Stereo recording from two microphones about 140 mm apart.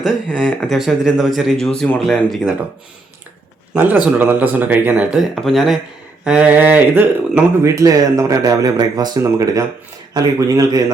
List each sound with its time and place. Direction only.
0.0 s speech: 5° right (ahead or behind)
4.0 s speech: 10° right (ahead or behind)